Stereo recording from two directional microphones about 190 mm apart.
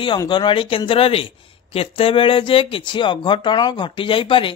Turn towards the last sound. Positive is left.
turn(degrees=25)  # may be behind; listen again after turning